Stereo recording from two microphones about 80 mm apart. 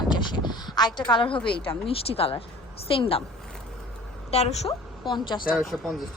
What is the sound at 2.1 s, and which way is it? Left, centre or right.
Speech, left.